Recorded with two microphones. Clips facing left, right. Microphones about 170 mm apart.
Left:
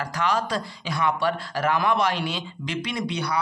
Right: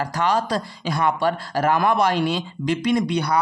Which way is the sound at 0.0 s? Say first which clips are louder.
Right 4 dB; 35° right (ahead or behind).